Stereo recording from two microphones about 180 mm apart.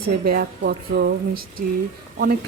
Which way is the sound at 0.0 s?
60° right (ahead or behind).